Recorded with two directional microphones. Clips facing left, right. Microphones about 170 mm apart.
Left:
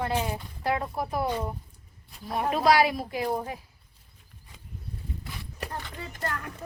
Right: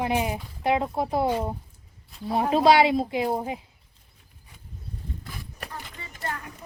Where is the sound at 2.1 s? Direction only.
Centre (ahead or behind).